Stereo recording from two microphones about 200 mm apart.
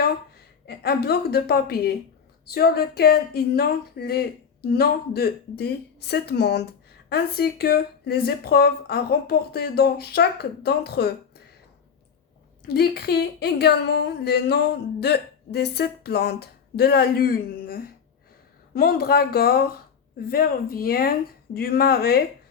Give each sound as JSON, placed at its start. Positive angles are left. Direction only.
{"t": 0.7, "sound": "speech", "side_deg": 50}
{"t": 12.6, "sound": "speech", "side_deg": 55}